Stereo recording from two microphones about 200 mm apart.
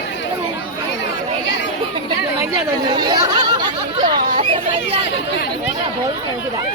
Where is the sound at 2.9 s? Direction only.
20° right (ahead or behind).